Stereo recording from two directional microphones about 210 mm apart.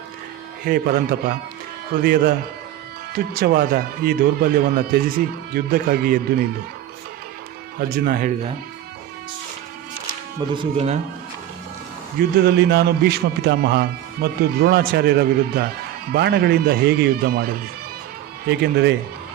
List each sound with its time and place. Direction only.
0.6 s speech: 45° right (ahead or behind)
7.8 s speech: 45° right (ahead or behind)
10.5 s speech: 25° right (ahead or behind)
12.4 s speech: 50° right (ahead or behind)